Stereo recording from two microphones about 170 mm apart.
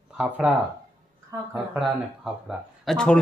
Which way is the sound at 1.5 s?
Centre (ahead or behind).